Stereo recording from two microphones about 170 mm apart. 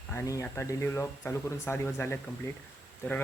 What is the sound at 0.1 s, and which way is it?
Speech, 15° left (ahead or behind).